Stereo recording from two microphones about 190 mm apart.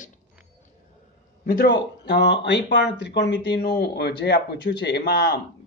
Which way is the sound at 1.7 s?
65° left (ahead or behind).